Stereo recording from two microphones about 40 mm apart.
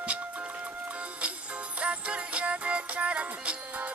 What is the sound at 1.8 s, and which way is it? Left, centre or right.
Music, right.